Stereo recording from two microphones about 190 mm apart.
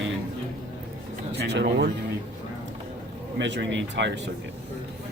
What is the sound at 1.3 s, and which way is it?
Speech, 60° right (ahead or behind).